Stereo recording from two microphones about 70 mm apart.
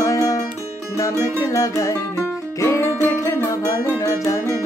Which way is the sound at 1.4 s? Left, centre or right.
Left.